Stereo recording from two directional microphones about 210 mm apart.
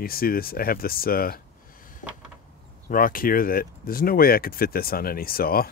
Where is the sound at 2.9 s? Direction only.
40° left (ahead or behind).